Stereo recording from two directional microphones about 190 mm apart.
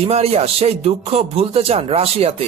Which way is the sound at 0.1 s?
30° right (ahead or behind).